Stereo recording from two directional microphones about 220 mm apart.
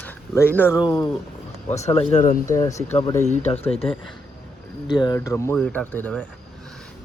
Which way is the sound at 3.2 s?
30° left (ahead or behind).